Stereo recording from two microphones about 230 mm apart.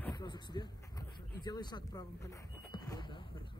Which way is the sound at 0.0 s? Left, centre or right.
Centre.